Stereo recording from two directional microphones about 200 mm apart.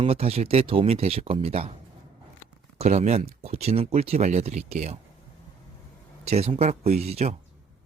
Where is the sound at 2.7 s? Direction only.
35° right (ahead or behind).